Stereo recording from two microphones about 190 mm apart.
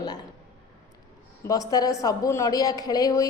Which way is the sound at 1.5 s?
20° left (ahead or behind).